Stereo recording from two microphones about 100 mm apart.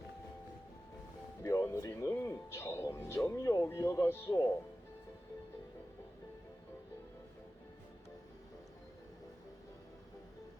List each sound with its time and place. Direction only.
1.4 s music: 30° left (ahead or behind)